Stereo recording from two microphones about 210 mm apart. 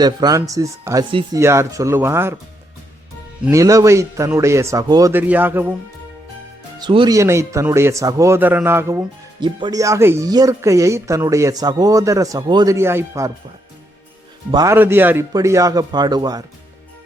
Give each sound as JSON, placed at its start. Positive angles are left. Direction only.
{"t": 0.0, "sound": "speech", "side_deg": -20}
{"t": 3.4, "sound": "speech", "side_deg": -15}
{"t": 6.7, "sound": "speech", "side_deg": -20}
{"t": 14.5, "sound": "speech", "side_deg": -15}